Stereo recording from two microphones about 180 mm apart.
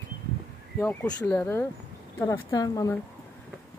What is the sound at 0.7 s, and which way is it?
Speech, 10° left (ahead or behind).